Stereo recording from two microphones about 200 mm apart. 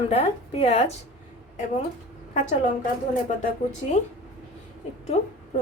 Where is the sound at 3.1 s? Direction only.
40° left (ahead or behind).